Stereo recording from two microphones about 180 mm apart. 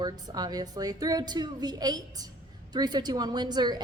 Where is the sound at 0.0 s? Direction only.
20° right (ahead or behind).